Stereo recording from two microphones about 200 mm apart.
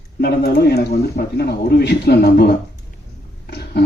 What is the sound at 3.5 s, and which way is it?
Roaring cats, 55° left (ahead or behind).